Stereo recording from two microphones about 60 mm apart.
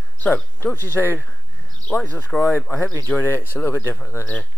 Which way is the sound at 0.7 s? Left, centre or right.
Left.